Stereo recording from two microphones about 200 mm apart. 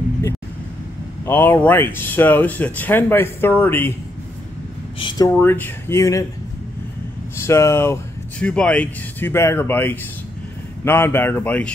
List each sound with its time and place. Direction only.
1.2 s speech: 10° left (ahead or behind)
4.9 s speech: 20° left (ahead or behind)
5.3 s speech: 10° left (ahead or behind)
7.4 s speech: 15° left (ahead or behind)